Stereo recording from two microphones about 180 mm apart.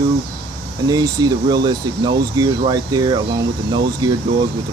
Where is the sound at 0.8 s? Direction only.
20° right (ahead or behind).